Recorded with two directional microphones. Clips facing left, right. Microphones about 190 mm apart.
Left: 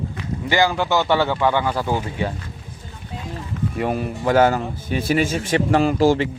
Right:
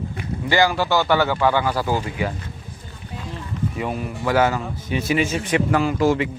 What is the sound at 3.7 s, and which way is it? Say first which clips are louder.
A man's voice: left 7 dB; 45° left (ahead or behind).